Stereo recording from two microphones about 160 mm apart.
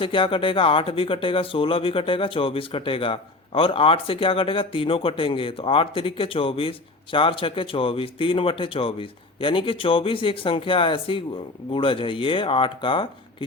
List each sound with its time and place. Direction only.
0.0 s speech: 35° left (ahead or behind)